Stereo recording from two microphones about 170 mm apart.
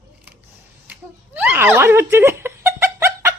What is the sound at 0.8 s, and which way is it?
Giggle, 10° right (ahead or behind).